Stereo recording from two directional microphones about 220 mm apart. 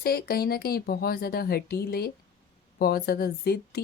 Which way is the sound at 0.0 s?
45° left (ahead or behind).